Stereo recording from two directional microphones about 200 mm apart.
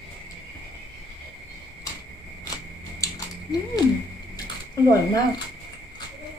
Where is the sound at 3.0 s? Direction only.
20° left (ahead or behind).